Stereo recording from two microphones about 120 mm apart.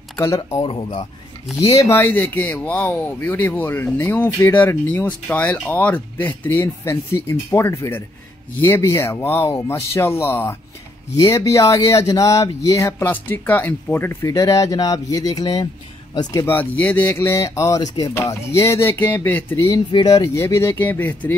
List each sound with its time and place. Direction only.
0.2 s speech: 30° left (ahead or behind)
0.7 s speech: 50° left (ahead or behind)
1.6 s speech: 25° left (ahead or behind)
13.1 s speech: 15° left (ahead or behind); by 16.4 s 35° left (ahead or behind)
16.4 s speech: 15° left (ahead or behind)
19.9 s speech: 35° left (ahead or behind); by 21.4 s 15° left (ahead or behind)